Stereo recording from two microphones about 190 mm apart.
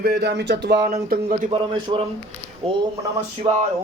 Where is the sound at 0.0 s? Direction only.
55° right (ahead or behind).